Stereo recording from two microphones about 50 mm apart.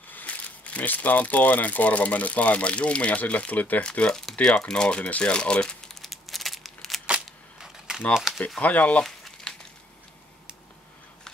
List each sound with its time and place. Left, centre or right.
0.1 s speech: left
4.1 s speech: centre
5.9 s a sound: centre
8.1 s speech: centre
8.5 s speech: left